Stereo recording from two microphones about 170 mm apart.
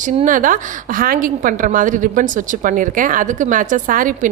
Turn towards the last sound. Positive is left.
turn(degrees=-50)  # may be behind; listen again after turning